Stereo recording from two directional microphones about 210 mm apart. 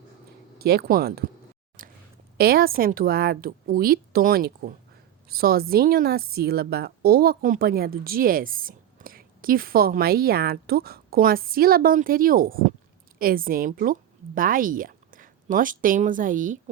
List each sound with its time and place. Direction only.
0.6 s a woman's voice: 50° right (ahead or behind)
1.8 s a sound: 40° right (ahead or behind)
2.4 s a woman's voice: 45° right (ahead or behind)